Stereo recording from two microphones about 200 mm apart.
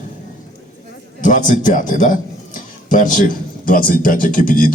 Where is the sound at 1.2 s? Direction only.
40° left (ahead or behind).